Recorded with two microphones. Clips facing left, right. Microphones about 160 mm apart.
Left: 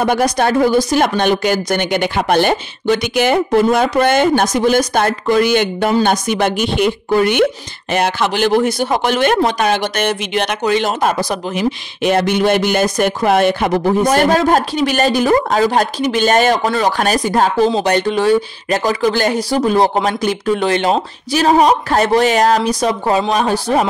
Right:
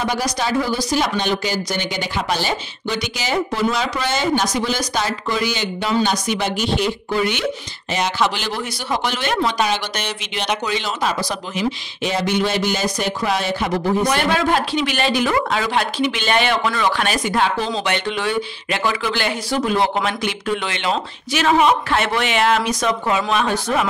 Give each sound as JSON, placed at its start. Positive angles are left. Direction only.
{"t": 0.0, "sound": "speech", "side_deg": 55}